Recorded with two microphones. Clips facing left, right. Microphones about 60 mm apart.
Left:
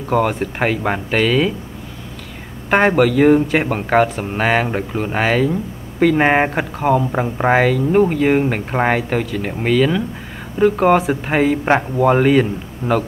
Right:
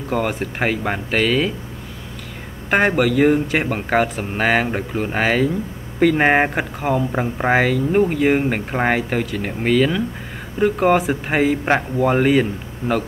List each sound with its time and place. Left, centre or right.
0.1 s speech: centre
2.7 s speech: centre